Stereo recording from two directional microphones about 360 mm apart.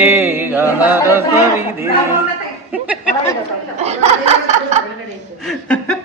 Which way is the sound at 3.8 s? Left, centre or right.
Centre.